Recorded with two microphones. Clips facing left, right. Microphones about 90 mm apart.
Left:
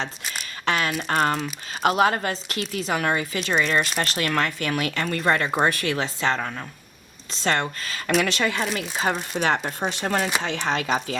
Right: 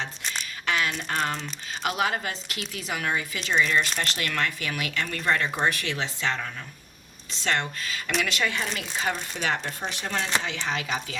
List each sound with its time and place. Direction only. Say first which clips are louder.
0.6 s a sound: left 3 dB; 40° left (ahead or behind)
1.0 s speech: left 6 dB; 45° left (ahead or behind)
10.4 s speech: left 5 dB; 60° left (ahead or behind)